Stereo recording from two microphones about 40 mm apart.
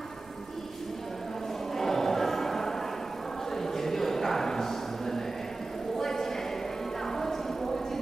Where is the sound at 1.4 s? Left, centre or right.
Centre.